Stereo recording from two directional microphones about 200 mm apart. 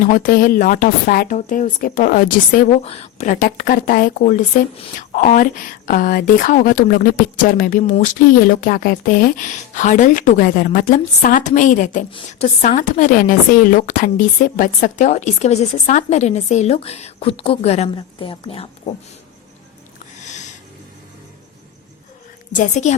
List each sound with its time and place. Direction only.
0.0 s speech: 40° left (ahead or behind)
2.6 s speech: 30° left (ahead or behind)
20.2 s a sound: 35° left (ahead or behind)
22.5 s speech: 40° left (ahead or behind)